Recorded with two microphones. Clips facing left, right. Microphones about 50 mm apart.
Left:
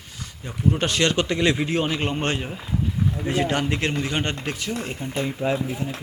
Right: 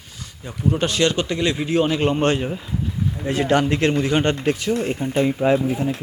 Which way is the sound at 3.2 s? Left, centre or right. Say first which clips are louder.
Right 6 dB; centre.